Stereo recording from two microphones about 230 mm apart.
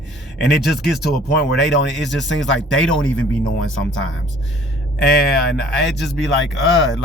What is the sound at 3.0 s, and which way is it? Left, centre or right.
Speech, left.